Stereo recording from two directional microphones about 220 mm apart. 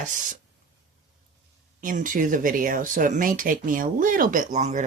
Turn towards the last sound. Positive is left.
turn(degrees=-30)  # may be behind; listen again after turning